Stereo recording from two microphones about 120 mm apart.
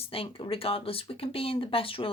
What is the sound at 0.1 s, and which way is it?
Speech, 45° left (ahead or behind).